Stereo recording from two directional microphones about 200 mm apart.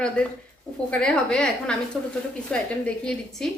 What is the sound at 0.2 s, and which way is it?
Speech, 5° left (ahead or behind).